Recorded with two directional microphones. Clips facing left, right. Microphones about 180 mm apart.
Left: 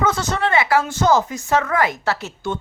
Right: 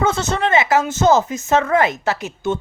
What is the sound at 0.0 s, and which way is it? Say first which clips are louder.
A woman's voice: right 2 dB; 25° right (ahead or behind).